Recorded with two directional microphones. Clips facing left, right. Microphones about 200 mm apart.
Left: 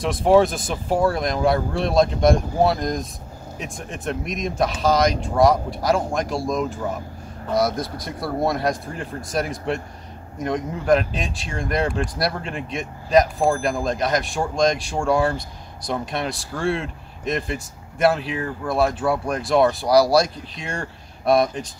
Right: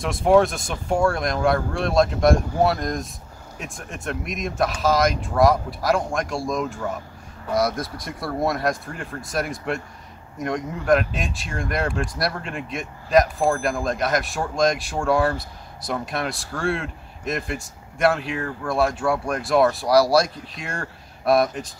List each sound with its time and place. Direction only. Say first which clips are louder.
0.0 s speech: left 1 dB; centre (ahead or behind)
12.3 s speech: left 2 dB; 30° left (ahead or behind)
12.7 s speech: left 1 dB; centre (ahead or behind)